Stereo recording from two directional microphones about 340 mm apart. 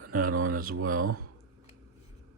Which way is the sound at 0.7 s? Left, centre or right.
Right.